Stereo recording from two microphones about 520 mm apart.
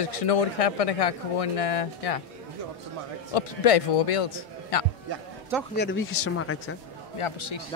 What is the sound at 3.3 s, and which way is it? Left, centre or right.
Speech, left.